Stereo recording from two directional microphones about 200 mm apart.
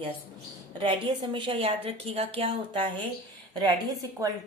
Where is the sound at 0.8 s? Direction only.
25° right (ahead or behind).